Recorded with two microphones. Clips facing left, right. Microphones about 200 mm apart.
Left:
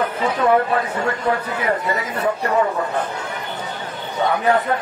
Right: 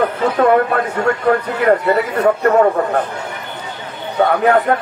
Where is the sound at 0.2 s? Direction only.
55° right (ahead or behind).